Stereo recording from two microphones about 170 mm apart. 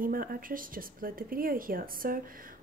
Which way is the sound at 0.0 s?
55° right (ahead or behind).